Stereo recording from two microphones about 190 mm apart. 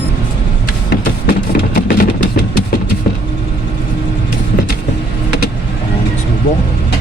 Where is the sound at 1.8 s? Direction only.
60° left (ahead or behind).